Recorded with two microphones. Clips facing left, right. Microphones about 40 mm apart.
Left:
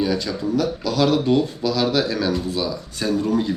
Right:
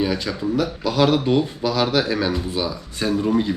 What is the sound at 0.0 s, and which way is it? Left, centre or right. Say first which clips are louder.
Speech: even; right.